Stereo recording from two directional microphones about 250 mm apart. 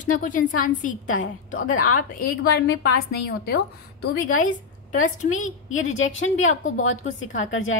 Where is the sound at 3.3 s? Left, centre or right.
Left.